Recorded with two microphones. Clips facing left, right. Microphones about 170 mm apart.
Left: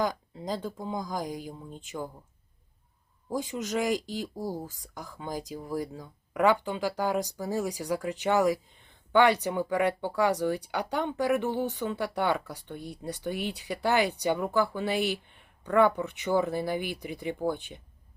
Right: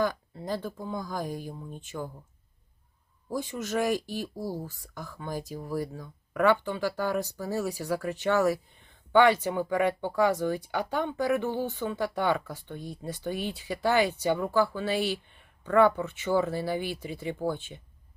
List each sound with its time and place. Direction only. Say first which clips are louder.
0.0 s speech: right 1 dB; 15° left (ahead or behind)
3.3 s speech: even; 15° left (ahead or behind)